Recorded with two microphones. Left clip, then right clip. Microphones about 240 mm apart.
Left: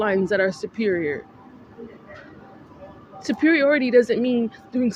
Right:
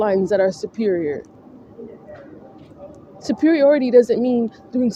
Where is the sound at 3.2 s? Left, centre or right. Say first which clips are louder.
Right 4 dB; left.